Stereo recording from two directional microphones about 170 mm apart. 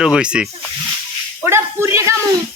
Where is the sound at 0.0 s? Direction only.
5° right (ahead or behind).